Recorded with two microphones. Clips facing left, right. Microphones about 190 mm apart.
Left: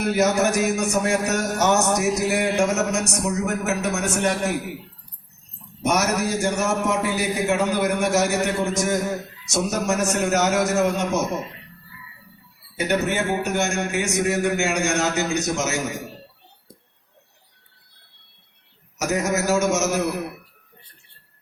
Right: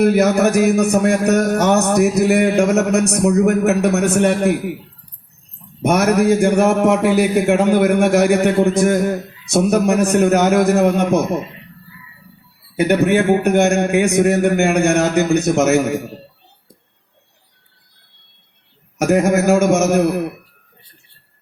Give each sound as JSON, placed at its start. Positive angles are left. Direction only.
{"t": 0.0, "sound": "a man's voice", "side_deg": -55}
{"t": 5.8, "sound": "a man's voice", "side_deg": -55}
{"t": 12.7, "sound": "a man's voice", "side_deg": -55}
{"t": 18.9, "sound": "a man's voice", "side_deg": -55}